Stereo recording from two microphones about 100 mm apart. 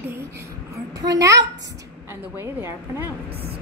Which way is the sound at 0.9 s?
40° right (ahead or behind).